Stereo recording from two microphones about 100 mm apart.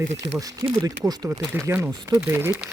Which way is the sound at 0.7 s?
35° right (ahead or behind).